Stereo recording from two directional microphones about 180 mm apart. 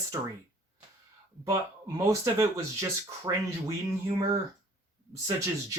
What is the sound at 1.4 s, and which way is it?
Speech, 20° right (ahead or behind).